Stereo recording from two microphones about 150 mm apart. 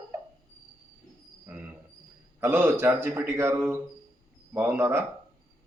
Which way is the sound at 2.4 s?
15° right (ahead or behind).